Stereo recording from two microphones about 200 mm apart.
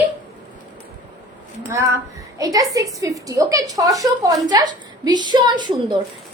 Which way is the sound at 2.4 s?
15° right (ahead or behind).